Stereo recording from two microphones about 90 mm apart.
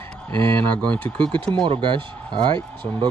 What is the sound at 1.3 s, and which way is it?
Speech, 65° right (ahead or behind).